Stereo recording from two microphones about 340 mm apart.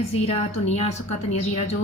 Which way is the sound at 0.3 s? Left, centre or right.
Centre.